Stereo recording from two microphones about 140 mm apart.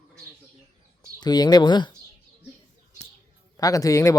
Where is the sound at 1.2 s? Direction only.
30° left (ahead or behind).